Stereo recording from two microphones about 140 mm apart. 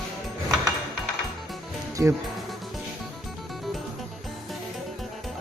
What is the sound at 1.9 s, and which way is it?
Music, 20° right (ahead or behind).